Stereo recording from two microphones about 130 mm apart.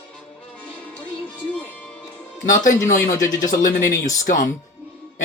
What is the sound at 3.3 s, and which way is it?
Speech, 30° left (ahead or behind).